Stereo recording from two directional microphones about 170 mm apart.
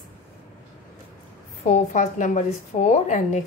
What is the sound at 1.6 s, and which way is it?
A woman's voice, 45° left (ahead or behind).